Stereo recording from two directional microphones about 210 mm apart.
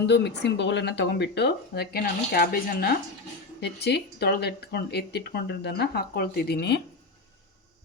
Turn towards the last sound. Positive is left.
turn(degrees=50)  # may be behind; listen again after turning